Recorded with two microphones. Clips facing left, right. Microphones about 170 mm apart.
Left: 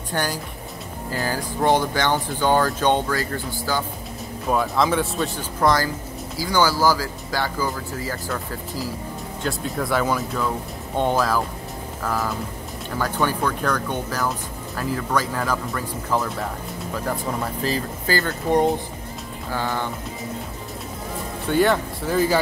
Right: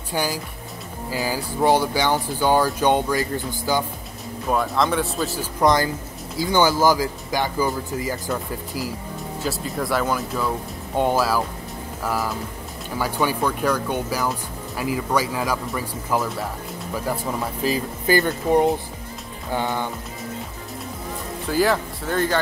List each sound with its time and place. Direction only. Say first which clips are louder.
0.1 s speech: right 1 dB; 5° right (ahead or behind)
4.5 s speech: left 1 dB; centre (ahead or behind)
5.6 s speech: right 1 dB; 20° right (ahead or behind)
9.4 s speech: even; centre (ahead or behind)
17.6 s speech: right 5 dB; 15° right (ahead or behind)
19.5 s speech: right 2 dB; 20° right (ahead or behind)
21.5 s speech: left 1 dB; centre (ahead or behind)